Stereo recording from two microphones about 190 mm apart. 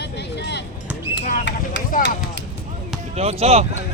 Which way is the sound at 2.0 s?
65° left (ahead or behind).